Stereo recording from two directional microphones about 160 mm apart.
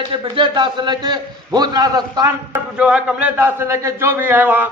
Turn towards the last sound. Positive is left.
turn(degrees=-10)  # may be behind; listen again after turning